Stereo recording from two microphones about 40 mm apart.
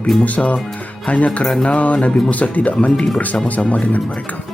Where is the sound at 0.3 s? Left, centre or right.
Left.